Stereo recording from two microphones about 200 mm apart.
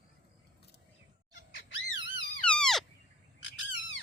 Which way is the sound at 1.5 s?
65° left (ahead or behind).